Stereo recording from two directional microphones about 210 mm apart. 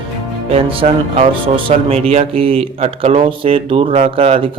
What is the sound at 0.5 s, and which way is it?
Speech, 25° right (ahead or behind).